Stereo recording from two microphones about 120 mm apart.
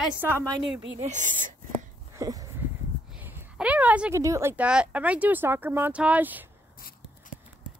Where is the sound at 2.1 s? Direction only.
30° right (ahead or behind).